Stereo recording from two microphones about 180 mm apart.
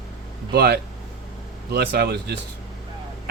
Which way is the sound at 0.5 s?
65° right (ahead or behind).